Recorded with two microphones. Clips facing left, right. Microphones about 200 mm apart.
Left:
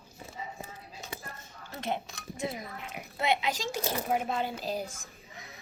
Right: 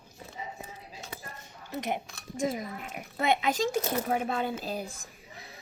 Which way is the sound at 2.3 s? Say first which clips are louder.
Right 5 dB; 45° right (ahead or behind).